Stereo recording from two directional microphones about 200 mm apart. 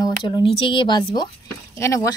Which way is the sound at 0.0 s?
25° left (ahead or behind).